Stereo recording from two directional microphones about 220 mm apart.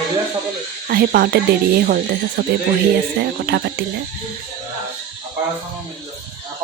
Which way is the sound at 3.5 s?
50° right (ahead or behind).